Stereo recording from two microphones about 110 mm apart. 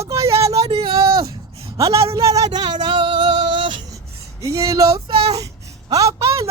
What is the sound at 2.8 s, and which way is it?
Music, 45° right (ahead or behind).